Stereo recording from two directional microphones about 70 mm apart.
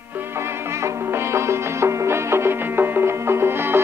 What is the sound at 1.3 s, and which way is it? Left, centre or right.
Music, right.